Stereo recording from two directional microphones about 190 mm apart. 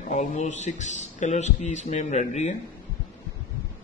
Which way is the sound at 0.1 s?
40° left (ahead or behind).